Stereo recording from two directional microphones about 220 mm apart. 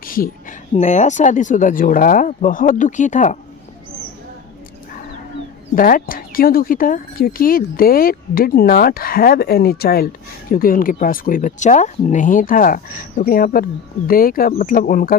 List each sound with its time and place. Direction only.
0.0 s a sound: 40° left (ahead or behind)
0.8 s speech: 30° left (ahead or behind)
5.7 s speech: 40° left (ahead or behind)